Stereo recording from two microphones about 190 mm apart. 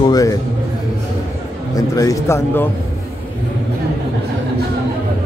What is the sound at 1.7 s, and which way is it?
Speech, 20° left (ahead or behind).